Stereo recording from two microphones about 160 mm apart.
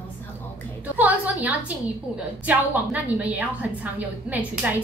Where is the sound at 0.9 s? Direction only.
10° right (ahead or behind).